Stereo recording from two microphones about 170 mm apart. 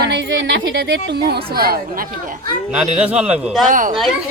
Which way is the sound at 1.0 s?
70° right (ahead or behind).